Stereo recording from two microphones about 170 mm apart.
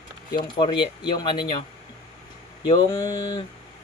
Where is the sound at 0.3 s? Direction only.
25° left (ahead or behind).